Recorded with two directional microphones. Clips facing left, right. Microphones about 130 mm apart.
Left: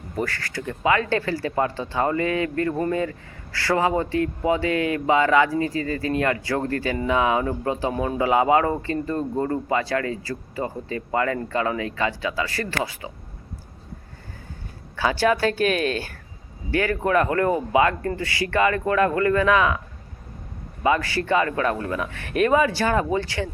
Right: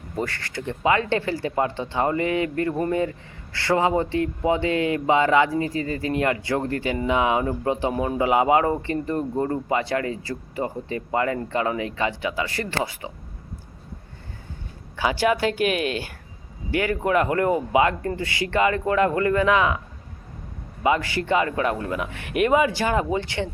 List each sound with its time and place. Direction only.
0.2 s speech: 20° right (ahead or behind)
14.9 s speech: 15° right (ahead or behind)
20.8 s speech: 20° right (ahead or behind)